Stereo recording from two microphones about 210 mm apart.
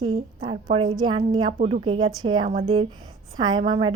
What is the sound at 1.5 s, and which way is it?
A woman's voice, 35° right (ahead or behind).